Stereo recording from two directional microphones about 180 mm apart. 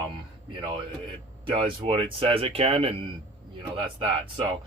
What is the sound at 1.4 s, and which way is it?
Speech, 25° right (ahead or behind).